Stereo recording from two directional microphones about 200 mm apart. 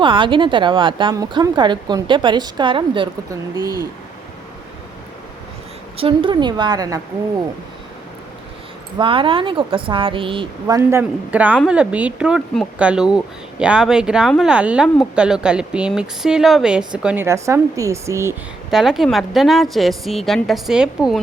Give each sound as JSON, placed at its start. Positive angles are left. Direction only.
{"t": 0.0, "sound": "speech", "side_deg": -25}
{"t": 6.0, "sound": "speech", "side_deg": -25}
{"t": 9.0, "sound": "speech", "side_deg": -25}
{"t": 18.7, "sound": "speech", "side_deg": 0}